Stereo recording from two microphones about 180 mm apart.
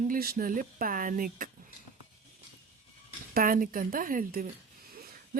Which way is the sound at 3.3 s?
50° right (ahead or behind).